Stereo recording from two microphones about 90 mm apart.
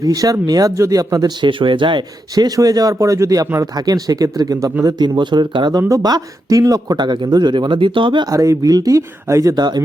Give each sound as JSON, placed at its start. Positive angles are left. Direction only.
{"t": 0.0, "sound": "speech", "side_deg": -45}
{"t": 1.5, "sound": "speech", "side_deg": -70}
{"t": 2.3, "sound": "speech", "side_deg": -45}
{"t": 4.9, "sound": "speech", "side_deg": -55}
{"t": 5.9, "sound": "speech", "side_deg": -45}
{"t": 8.3, "sound": "speech", "side_deg": -40}
{"t": 9.6, "sound": "speech", "side_deg": -50}